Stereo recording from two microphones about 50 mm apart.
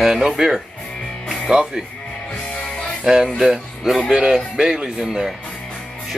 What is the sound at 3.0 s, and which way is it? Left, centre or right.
Speech, centre.